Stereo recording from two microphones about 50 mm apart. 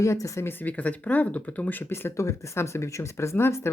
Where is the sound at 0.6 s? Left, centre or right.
Left.